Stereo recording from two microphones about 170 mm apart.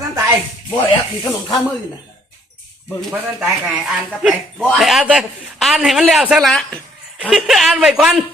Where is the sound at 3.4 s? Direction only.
5° right (ahead or behind).